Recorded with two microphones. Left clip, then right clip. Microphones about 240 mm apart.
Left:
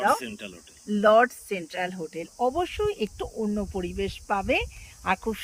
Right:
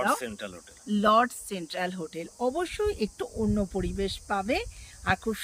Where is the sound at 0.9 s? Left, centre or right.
Centre.